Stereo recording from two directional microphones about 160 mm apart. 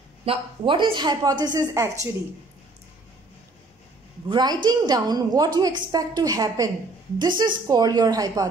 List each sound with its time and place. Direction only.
0.2 s a woman's voice: 35° right (ahead or behind)
4.3 s a woman's voice: 25° right (ahead or behind)